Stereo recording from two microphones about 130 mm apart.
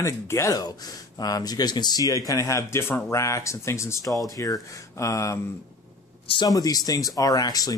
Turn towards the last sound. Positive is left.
turn(degrees=30)  # may be behind; listen again after turning